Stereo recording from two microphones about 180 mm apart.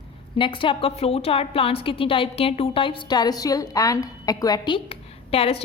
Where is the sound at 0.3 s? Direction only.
30° left (ahead or behind).